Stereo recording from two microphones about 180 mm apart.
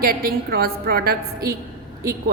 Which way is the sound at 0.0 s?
55° right (ahead or behind).